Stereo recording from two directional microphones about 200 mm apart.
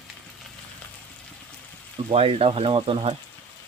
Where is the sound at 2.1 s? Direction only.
30° right (ahead or behind).